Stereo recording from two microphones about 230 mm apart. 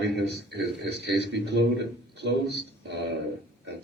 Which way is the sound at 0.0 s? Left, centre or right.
Right.